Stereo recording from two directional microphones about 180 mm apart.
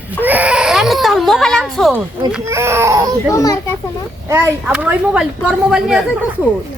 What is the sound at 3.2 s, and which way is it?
Speech, 20° left (ahead or behind).